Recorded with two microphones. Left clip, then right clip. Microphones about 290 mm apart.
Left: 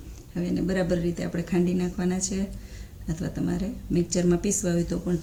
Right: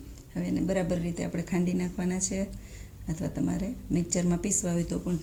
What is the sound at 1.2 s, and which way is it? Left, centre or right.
Speech, centre.